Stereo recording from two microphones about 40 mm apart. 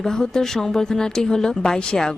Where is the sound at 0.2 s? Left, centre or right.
Centre.